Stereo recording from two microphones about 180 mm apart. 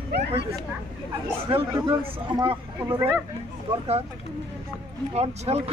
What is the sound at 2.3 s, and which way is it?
Speech, 25° right (ahead or behind).